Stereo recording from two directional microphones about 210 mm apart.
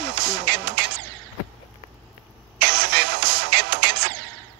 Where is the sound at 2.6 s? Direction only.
50° right (ahead or behind).